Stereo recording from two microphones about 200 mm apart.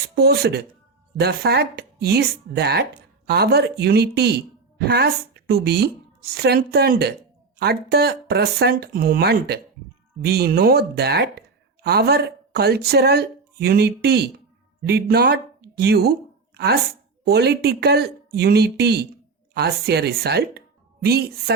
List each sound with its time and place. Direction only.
0.2 s a woman's voice: 55° right (ahead or behind)
17.2 s speech: 55° right (ahead or behind)